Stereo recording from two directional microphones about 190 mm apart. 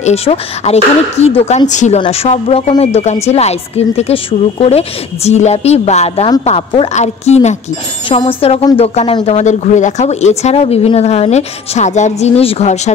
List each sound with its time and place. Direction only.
0.0 s speech: 35° left (ahead or behind)